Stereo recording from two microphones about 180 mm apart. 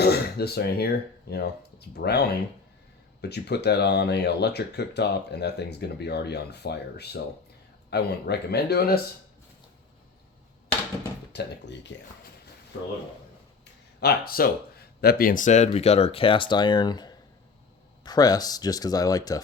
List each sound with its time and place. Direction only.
0.0 s speech: 65° left (ahead or behind)
11.3 s speech: 70° left (ahead or behind)
14.0 s speech: 55° left (ahead or behind); by 19.4 s 20° left (ahead or behind)